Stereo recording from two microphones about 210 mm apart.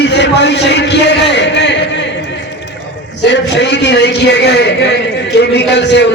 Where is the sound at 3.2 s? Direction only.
55° left (ahead or behind).